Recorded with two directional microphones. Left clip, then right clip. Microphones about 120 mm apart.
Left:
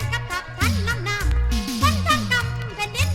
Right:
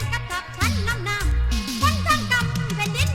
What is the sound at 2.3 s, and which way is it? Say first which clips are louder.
Music: even; 25° right (ahead or behind).